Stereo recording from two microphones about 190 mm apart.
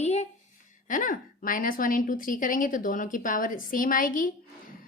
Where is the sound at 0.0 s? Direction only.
35° left (ahead or behind).